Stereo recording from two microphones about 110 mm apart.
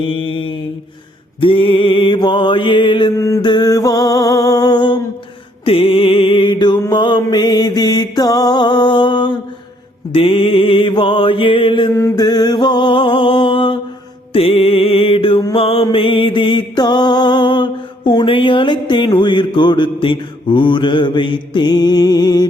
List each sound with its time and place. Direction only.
1.4 s mantra: 50° left (ahead or behind)
3.2 s mantra: 25° left (ahead or behind)
3.4 s music: 40° left (ahead or behind)
5.6 s music: 60° left (ahead or behind)
6.9 s mantra: 45° left (ahead or behind)
10.1 s music: 60° left (ahead or behind)
11.9 s mantra: 25° left (ahead or behind)
12.2 s music: 40° left (ahead or behind)
14.3 s music: 60° left (ahead or behind); by 22.4 s 40° left (ahead or behind)